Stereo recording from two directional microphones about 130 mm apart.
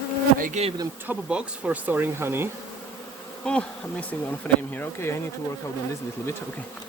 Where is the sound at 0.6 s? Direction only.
60° right (ahead or behind).